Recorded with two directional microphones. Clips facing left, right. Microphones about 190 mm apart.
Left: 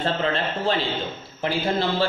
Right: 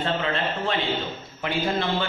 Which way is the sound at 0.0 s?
35° left (ahead or behind).